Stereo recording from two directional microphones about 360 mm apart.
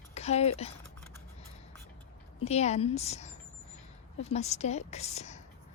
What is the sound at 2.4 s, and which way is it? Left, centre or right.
Speech, centre.